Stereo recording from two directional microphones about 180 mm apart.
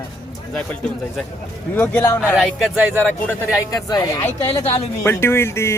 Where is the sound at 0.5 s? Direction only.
5° left (ahead or behind).